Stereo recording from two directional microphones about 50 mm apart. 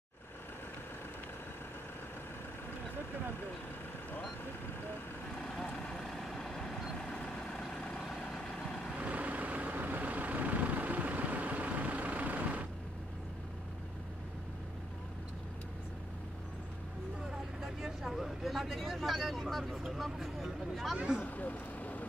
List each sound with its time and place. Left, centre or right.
5.8 s vehicle: centre
8.2 s vehicle: centre
8.9 s vehicle: right
17.6 s vehicle: centre
20.9 s speech: centre
21.2 s vehicle: left